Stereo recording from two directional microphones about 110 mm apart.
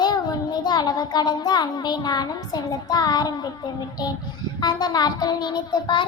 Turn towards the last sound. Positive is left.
turn(degrees=40)  # may be behind; listen again after turning